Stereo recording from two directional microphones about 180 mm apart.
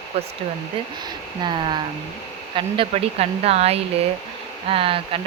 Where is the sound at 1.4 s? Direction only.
25° right (ahead or behind).